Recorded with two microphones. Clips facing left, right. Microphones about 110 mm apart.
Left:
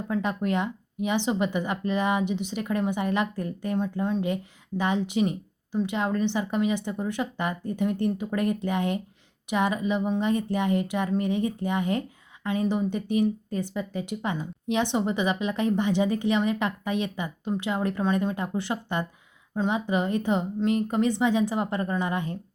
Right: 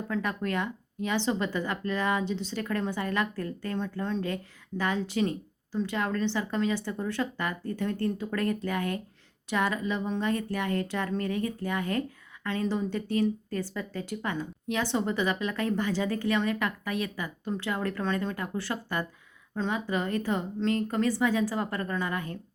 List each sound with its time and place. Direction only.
0.1 s speech: 20° left (ahead or behind)